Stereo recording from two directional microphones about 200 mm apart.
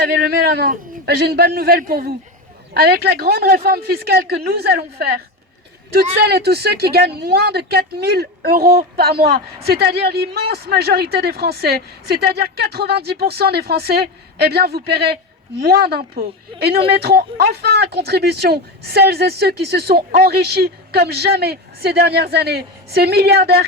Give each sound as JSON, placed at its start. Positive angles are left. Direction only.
{"t": 0.0, "sound": "a woman's voice", "side_deg": -50}
{"t": 6.2, "sound": "a woman's voice", "side_deg": -55}